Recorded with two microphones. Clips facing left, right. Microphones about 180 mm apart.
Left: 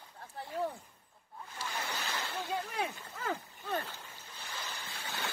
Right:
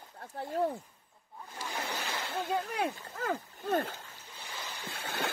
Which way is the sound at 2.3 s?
55° right (ahead or behind).